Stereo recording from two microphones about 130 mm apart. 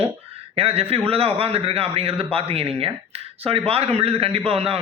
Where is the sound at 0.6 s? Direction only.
50° right (ahead or behind).